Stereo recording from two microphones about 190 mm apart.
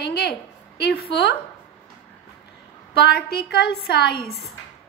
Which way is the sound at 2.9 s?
60° left (ahead or behind).